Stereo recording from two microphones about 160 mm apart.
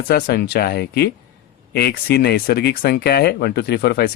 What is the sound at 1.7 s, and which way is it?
Speech, 75° left (ahead or behind).